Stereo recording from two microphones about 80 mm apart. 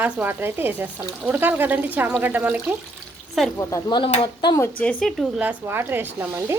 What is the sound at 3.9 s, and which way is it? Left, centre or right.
Speech, left.